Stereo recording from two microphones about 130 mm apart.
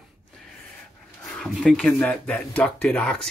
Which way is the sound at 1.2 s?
5° left (ahead or behind).